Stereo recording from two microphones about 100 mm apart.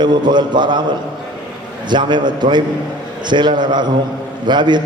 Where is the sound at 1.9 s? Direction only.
50° right (ahead or behind).